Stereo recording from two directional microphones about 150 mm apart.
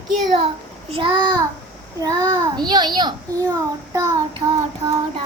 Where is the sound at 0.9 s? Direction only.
35° right (ahead or behind).